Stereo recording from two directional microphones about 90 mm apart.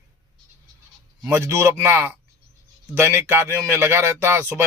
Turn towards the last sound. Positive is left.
turn(degrees=-30)  # may be behind; listen again after turning